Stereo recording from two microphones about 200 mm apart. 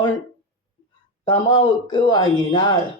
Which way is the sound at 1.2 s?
25° left (ahead or behind).